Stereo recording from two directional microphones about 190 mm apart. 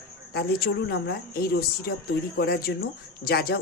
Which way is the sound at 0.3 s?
55° left (ahead or behind).